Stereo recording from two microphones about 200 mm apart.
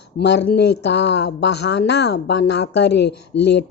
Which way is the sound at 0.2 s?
55° left (ahead or behind).